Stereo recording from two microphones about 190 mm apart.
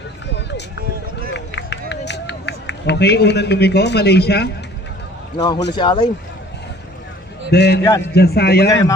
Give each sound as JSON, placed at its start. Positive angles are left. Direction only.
{"t": 0.3, "sound": "run", "side_deg": 65}
{"t": 5.7, "sound": "speech", "side_deg": 25}
{"t": 7.5, "sound": "a man's voice", "side_deg": 60}